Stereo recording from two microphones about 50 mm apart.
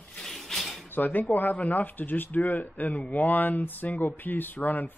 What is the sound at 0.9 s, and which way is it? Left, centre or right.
Speech, left.